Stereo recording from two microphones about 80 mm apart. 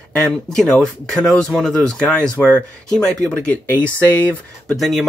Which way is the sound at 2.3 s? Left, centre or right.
Right.